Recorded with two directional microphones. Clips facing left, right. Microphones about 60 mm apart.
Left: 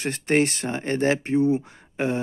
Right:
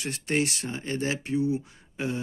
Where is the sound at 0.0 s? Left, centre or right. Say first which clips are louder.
Left 6 dB; left.